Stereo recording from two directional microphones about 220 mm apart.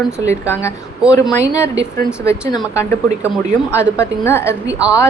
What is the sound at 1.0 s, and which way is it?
Speech, 5° right (ahead or behind).